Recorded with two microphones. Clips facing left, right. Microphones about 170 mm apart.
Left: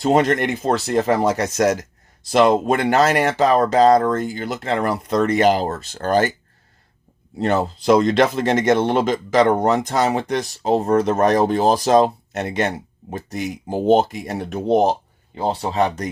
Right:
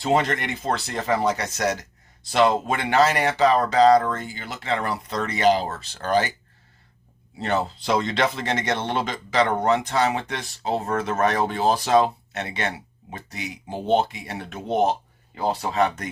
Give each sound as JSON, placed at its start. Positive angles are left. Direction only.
{"t": 0.0, "sound": "speech", "side_deg": 45}
{"t": 7.3, "sound": "speech", "side_deg": 45}